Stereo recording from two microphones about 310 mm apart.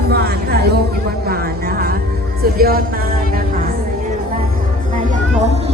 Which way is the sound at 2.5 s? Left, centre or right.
Right.